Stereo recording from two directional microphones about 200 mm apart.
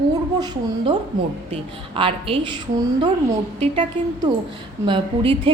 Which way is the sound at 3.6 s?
25° right (ahead or behind).